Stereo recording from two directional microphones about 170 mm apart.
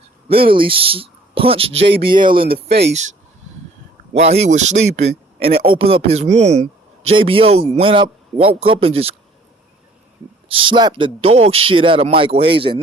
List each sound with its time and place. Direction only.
0.3 s a man's voice: 30° right (ahead or behind)
2.6 s speech: 80° right
4.1 s a man's voice: 40° right (ahead or behind)
10.6 s a man's voice: 30° right (ahead or behind)